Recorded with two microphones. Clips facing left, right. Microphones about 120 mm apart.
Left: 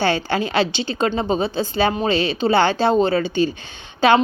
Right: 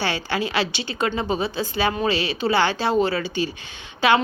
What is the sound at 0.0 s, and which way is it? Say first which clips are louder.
A woman's voice: left 5 dB; 30° left (ahead or behind).